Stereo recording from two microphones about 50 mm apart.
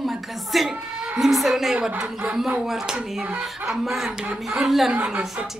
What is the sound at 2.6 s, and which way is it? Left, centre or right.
Speech, centre.